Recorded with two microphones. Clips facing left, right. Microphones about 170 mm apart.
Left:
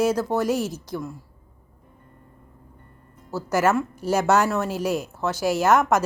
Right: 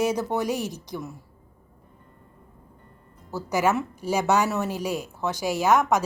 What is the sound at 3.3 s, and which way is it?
A woman's voice, 15° right (ahead or behind).